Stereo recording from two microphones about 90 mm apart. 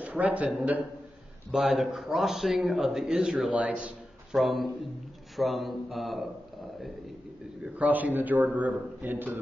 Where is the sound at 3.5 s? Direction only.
15° right (ahead or behind).